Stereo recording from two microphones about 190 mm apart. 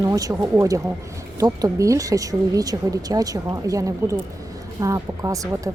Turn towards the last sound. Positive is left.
turn(degrees=-15)  # may be behind; listen again after turning